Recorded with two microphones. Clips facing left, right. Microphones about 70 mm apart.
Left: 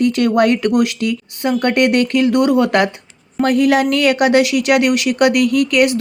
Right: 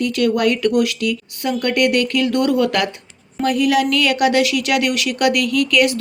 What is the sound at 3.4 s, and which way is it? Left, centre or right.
Speech, left.